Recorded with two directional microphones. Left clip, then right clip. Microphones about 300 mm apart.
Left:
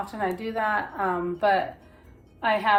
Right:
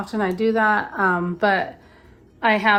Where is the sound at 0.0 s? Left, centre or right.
Right.